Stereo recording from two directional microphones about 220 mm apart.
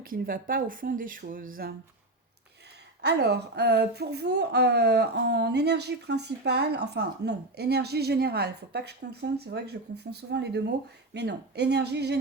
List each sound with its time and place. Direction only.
0.0 s speech: 40° right (ahead or behind)
3.0 s speech: 50° right (ahead or behind)